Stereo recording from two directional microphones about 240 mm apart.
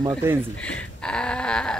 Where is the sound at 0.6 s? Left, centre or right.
Centre.